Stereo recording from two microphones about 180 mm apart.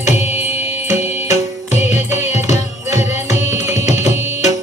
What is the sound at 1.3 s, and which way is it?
Music, 40° left (ahead or behind).